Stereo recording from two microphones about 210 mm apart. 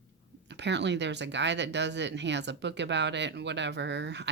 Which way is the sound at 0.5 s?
55° right (ahead or behind).